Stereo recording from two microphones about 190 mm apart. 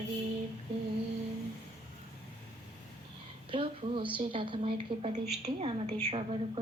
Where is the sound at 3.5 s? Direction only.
25° right (ahead or behind).